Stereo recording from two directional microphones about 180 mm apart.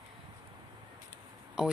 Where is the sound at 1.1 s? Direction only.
5° right (ahead or behind).